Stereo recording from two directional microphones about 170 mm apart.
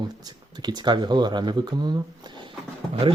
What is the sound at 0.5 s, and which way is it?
Speech, 25° right (ahead or behind).